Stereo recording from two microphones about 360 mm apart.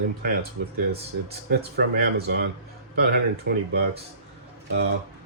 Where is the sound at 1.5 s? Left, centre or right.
Right.